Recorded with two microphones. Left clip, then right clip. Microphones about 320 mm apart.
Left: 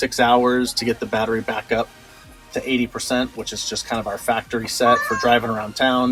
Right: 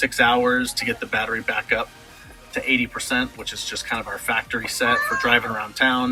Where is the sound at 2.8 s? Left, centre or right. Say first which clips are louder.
Left 1 dB; centre.